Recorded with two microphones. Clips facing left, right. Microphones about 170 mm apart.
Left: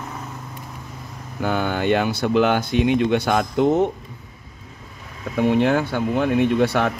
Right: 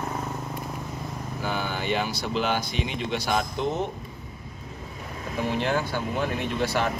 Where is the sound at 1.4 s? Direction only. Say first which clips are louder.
Left 8 dB; 55° left (ahead or behind).